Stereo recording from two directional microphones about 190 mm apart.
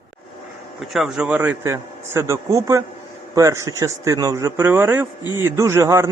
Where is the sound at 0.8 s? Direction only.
Centre (ahead or behind).